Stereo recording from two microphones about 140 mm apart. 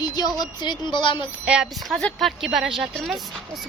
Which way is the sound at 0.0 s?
30° left (ahead or behind).